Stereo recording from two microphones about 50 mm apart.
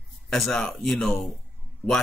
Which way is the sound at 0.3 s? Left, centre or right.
Centre.